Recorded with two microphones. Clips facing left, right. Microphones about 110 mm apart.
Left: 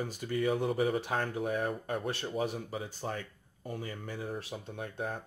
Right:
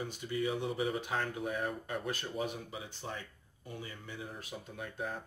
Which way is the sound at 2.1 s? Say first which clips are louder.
Left 4 dB; 35° left (ahead or behind).